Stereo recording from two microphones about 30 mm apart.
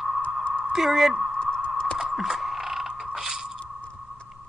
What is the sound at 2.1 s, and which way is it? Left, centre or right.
Mechanisms, centre.